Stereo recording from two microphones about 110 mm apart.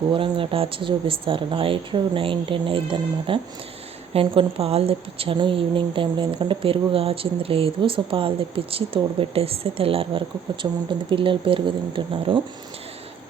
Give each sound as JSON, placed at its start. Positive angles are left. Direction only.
{"t": 0.1, "sound": "speech", "side_deg": -55}